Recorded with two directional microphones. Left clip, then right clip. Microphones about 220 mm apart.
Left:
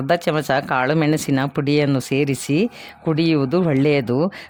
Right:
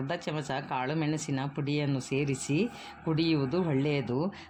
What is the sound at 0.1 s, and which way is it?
Speech, 50° left (ahead or behind).